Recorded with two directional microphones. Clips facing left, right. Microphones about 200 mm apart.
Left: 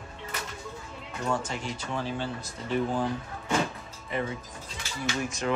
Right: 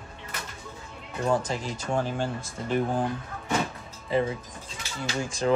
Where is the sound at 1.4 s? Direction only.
45° right (ahead or behind).